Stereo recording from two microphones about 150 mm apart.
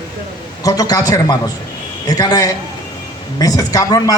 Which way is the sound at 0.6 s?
25° left (ahead or behind).